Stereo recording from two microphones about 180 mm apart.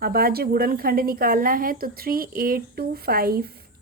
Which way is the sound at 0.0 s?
55° right (ahead or behind).